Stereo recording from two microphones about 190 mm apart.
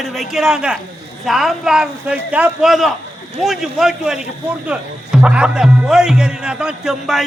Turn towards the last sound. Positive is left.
turn(degrees=0)  # may be behind; listen again after turning